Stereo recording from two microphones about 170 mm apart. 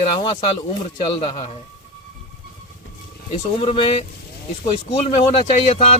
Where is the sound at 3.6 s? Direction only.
35° left (ahead or behind).